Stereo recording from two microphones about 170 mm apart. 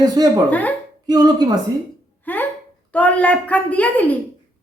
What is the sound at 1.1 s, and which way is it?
Speech, 25° right (ahead or behind).